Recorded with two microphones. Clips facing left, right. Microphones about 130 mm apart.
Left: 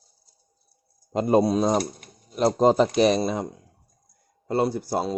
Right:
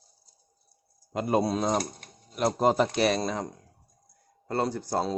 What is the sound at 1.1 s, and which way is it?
Speech, 25° left (ahead or behind).